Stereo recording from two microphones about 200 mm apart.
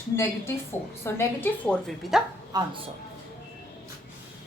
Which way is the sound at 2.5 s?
20° right (ahead or behind).